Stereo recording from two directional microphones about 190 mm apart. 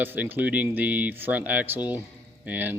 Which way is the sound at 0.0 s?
10° right (ahead or behind).